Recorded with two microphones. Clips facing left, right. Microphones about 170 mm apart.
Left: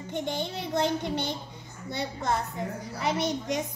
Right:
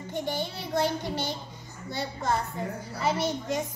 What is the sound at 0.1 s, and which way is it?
A child's voice, 20° left (ahead or behind).